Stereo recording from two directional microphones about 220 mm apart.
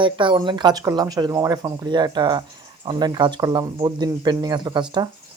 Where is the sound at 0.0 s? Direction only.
20° right (ahead or behind).